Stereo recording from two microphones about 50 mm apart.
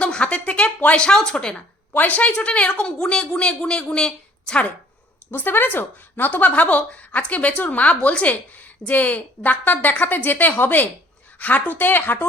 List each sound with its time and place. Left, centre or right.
0.0 s a sound: left
0.9 s speech: centre
1.9 s a woman's voice: left; by 4.6 s centre
5.3 s speech: left